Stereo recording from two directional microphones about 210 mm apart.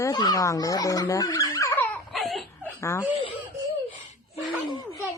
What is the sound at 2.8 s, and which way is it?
Speech, 15° left (ahead or behind).